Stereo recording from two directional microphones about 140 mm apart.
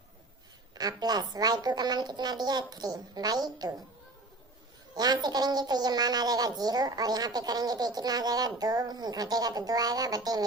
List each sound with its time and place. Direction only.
0.7 s a woman's voice: 30° right (ahead or behind)
4.9 s a woman's voice: 30° right (ahead or behind)